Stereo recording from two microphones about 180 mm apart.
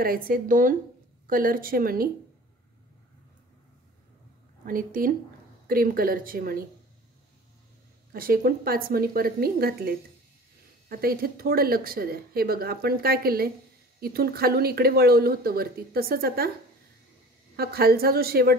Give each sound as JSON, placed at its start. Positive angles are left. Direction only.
{"t": 0.0, "sound": "a woman's voice", "side_deg": -55}
{"t": 4.6, "sound": "a woman's voice", "side_deg": -50}
{"t": 8.1, "sound": "speech", "side_deg": -55}
{"t": 17.6, "sound": "speech", "side_deg": -60}